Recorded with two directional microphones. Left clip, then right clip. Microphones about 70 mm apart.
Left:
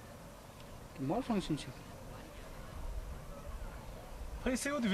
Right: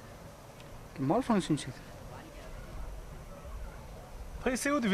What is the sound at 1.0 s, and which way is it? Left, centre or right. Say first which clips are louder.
Speech: right 7 dB; right.